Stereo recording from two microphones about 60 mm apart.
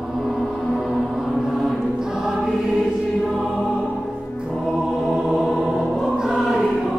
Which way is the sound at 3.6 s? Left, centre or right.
Centre.